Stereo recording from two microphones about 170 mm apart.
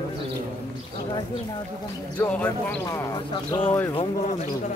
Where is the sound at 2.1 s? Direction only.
10° left (ahead or behind).